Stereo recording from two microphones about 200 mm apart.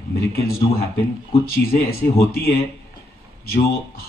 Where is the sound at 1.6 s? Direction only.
50° left (ahead or behind).